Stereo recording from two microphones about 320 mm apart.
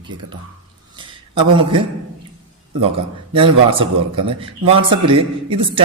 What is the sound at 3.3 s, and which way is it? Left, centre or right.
A man's voice, centre.